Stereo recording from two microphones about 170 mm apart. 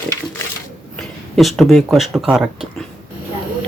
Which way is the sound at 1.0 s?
Centre (ahead or behind).